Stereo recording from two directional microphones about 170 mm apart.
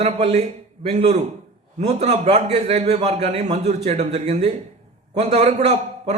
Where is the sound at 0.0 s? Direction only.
40° right (ahead or behind).